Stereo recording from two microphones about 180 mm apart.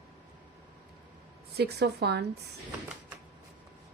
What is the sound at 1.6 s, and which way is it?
Speech, 65° right (ahead or behind).